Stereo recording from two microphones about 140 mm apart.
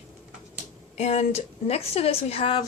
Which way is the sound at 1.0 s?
55° left (ahead or behind).